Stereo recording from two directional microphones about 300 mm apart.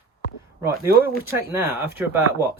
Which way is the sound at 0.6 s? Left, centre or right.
Centre.